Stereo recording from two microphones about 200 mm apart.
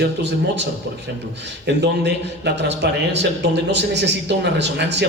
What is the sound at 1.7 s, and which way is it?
A man's voice, 60° right (ahead or behind).